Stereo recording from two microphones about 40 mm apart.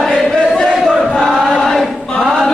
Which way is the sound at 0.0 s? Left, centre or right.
Centre.